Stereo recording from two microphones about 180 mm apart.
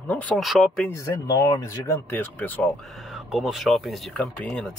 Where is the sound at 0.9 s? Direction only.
15° left (ahead or behind).